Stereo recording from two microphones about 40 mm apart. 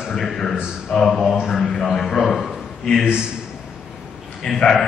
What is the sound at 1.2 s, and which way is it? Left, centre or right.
Speech, centre.